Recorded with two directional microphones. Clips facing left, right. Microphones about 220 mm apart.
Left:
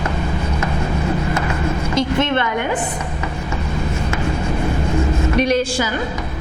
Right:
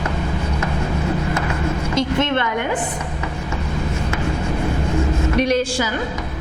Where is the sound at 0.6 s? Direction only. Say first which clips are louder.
Left 1 dB; 15° left (ahead or behind).